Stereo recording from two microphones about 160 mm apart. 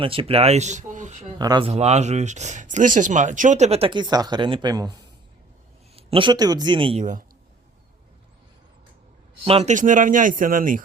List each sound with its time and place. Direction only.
0.0 s speech: 35° right (ahead or behind)
1.4 s speech: 25° right (ahead or behind)
1.7 s speech: 45° right (ahead or behind); by 5.0 s 25° right (ahead or behind)
6.0 s a man's voice: 35° right (ahead or behind)
7.0 s speech: 55° right (ahead or behind)
9.4 s a man's voice: 40° right (ahead or behind); by 10.8 s 60° right (ahead or behind)